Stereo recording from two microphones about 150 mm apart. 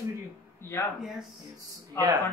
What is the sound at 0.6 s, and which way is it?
Speech, 15° left (ahead or behind).